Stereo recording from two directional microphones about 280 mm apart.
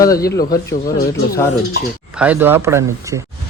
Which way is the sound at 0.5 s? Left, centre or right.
Left.